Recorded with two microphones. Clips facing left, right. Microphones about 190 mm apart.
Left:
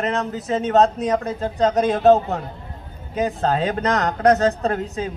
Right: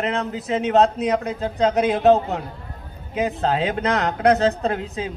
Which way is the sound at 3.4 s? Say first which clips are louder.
Left 1 dB; 40° left (ahead or behind).